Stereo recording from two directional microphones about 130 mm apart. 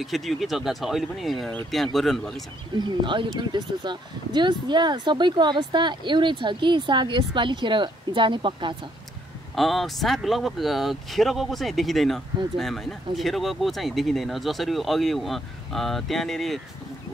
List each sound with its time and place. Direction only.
0.0 s speech: centre (ahead or behind)
2.8 s speech: 35° right (ahead or behind)
9.6 s speech: centre (ahead or behind)